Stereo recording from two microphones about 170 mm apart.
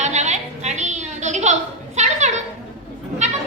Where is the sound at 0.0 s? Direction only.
45° right (ahead or behind).